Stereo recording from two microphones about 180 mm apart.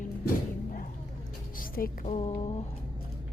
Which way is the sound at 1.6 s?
55° left (ahead or behind).